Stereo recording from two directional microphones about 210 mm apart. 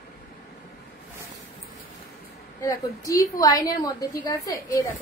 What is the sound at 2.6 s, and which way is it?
A woman's voice, 15° left (ahead or behind).